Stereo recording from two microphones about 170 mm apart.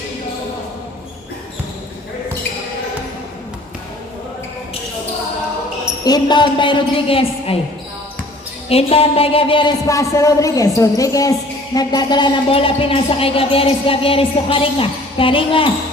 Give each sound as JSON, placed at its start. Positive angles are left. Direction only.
{"t": 6.1, "sound": "a woman's voice", "side_deg": 25}
{"t": 8.7, "sound": "speech", "side_deg": 35}